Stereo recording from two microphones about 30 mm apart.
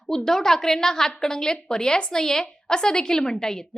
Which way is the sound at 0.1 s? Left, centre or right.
Centre.